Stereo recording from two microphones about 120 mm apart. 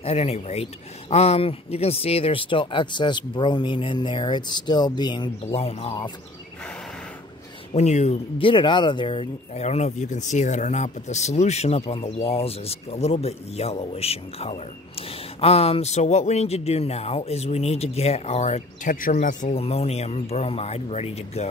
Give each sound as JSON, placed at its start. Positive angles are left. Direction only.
{"t": 0.0, "sound": "speech", "side_deg": 60}
{"t": 5.4, "sound": "speech", "side_deg": 60}
{"t": 7.7, "sound": "speech", "side_deg": 70}
{"t": 8.4, "sound": "speech", "side_deg": 45}
{"t": 19.6, "sound": "speech", "side_deg": 60}